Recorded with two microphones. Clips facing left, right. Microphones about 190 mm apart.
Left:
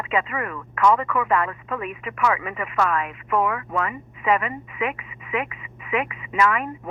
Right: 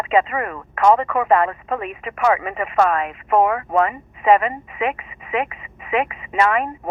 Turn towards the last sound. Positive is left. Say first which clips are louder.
# right 3 dB
turn(degrees=-25)  # may be behind; listen again after turning